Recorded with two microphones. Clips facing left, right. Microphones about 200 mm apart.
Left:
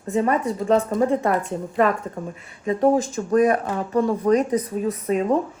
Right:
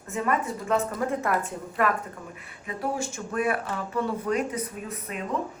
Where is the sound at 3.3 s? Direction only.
40° left (ahead or behind).